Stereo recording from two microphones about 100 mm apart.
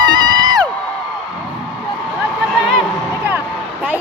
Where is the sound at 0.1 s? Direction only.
45° right (ahead or behind).